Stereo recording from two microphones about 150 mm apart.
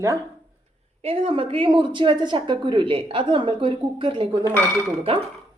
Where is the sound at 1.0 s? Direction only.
40° right (ahead or behind).